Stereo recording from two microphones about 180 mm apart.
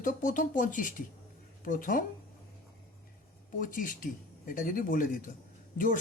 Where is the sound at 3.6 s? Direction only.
50° left (ahead or behind).